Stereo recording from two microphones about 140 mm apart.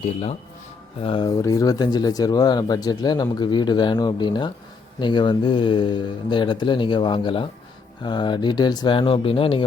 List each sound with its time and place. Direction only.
0.0 s speech: 50° left (ahead or behind)
1.0 s speech: 35° left (ahead or behind)